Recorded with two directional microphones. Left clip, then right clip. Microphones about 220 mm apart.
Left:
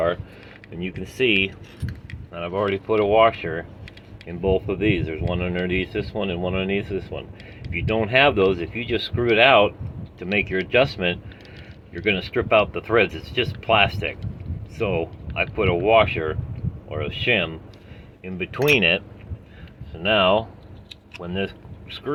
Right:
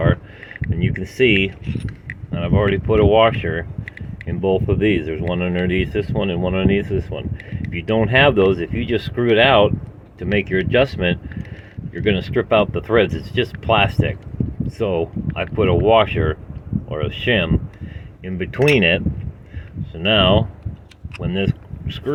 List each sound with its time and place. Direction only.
0.8 s speech: 45° right (ahead or behind)
18.6 s speech: 25° right (ahead or behind)
20.0 s speech: 40° right (ahead or behind)
21.2 s a sound: 40° right (ahead or behind)